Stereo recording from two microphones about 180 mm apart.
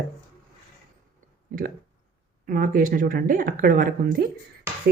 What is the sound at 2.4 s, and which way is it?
A woman's voice, 50° right (ahead or behind).